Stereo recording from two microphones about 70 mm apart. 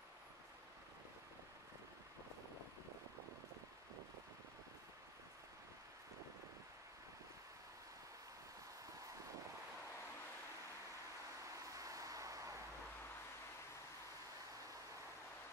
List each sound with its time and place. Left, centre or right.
11.6 s vehicle: right